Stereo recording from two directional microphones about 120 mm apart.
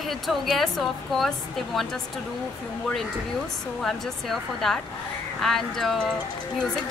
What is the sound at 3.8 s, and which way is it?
Speech, 5° left (ahead or behind).